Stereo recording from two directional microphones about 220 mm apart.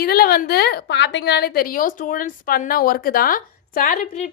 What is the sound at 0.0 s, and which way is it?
A woman's voice, 45° left (ahead or behind).